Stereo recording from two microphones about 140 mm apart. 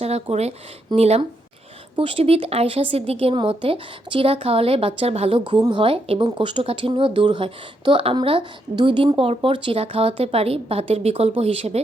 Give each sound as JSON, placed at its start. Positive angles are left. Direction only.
{"t": 0.0, "sound": "speech", "side_deg": -50}